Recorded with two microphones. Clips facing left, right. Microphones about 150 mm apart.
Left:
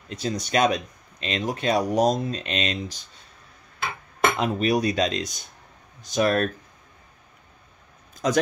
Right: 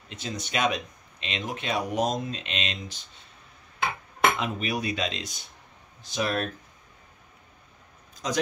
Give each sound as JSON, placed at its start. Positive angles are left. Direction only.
{"t": 0.1, "sound": "speech", "side_deg": 40}
{"t": 4.4, "sound": "speech", "side_deg": 40}
{"t": 8.1, "sound": "a sound", "side_deg": 50}